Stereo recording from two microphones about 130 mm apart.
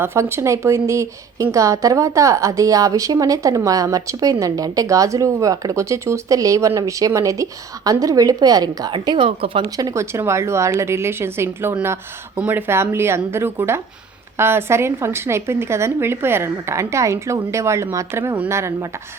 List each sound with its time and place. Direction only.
0.0 s a woman's voice: 20° right (ahead or behind); by 9.6 s 40° right (ahead or behind)
9.6 s a woman's voice: 30° right (ahead or behind)